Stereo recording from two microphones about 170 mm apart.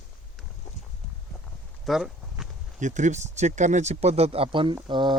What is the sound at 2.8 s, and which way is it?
Speech, 45° right (ahead or behind).